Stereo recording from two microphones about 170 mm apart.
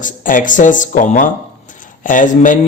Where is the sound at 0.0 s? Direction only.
50° left (ahead or behind).